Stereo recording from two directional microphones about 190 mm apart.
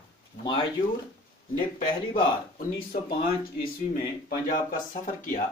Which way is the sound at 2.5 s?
50° left (ahead or behind).